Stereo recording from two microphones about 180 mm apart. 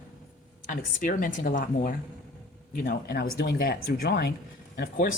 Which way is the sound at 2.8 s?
60° left (ahead or behind).